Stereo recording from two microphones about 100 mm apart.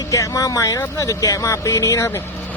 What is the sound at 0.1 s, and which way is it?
Speech, 35° left (ahead or behind).